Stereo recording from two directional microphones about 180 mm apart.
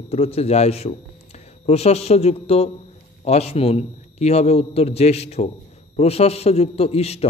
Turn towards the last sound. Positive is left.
turn(degrees=35)  # may be behind; listen again after turning